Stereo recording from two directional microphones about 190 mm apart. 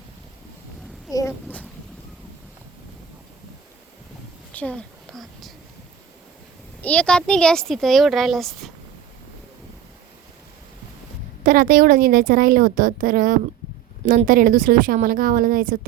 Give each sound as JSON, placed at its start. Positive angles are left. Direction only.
{"t": 1.1, "sound": "a child's voice", "side_deg": 20}
{"t": 4.5, "sound": "a sound", "side_deg": 5}
{"t": 6.8, "sound": "speech", "side_deg": 5}
{"t": 11.4, "sound": "speech", "side_deg": -50}